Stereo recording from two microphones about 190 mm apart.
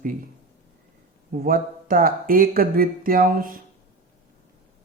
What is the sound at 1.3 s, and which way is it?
Speech, 45° right (ahead or behind).